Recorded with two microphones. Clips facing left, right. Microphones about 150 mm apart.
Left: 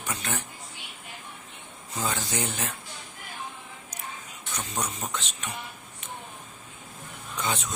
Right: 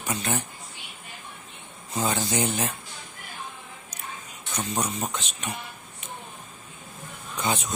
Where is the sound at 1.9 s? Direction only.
20° right (ahead or behind).